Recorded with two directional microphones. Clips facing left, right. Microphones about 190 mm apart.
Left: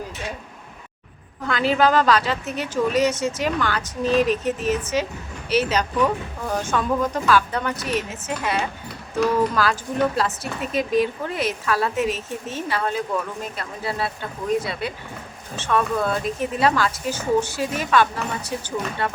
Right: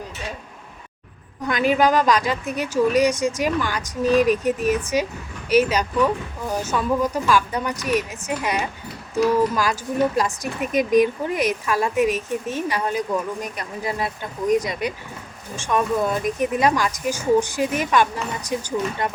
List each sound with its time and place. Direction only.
1.5 s speech: 15° right (ahead or behind)
9.1 s speech: 15° right (ahead or behind)